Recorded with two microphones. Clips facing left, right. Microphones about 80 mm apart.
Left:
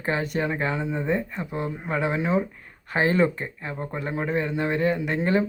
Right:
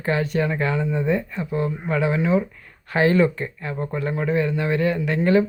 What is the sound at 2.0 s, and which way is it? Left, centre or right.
Speech, left.